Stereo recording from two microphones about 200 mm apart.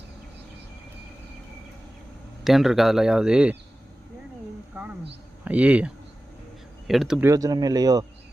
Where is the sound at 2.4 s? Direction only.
Centre (ahead or behind).